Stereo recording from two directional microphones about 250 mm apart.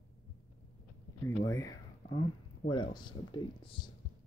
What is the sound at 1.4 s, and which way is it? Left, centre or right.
Speech, centre.